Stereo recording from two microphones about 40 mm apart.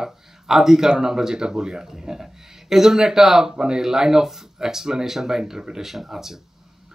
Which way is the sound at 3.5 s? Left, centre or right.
Centre.